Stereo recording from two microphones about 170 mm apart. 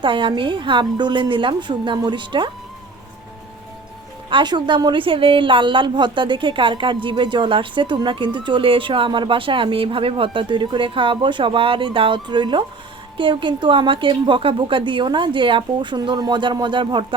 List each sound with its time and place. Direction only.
0.0 s a woman's voice: 30° right (ahead or behind)
4.3 s a woman's voice: 25° right (ahead or behind)